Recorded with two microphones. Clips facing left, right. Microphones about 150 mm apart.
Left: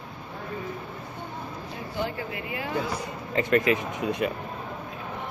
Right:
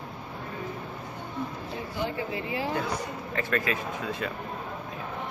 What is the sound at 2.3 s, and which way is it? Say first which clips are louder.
Speech: right 3 dB; 30° right (ahead or behind).